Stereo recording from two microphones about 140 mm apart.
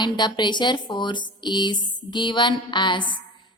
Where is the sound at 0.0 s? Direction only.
30° left (ahead or behind).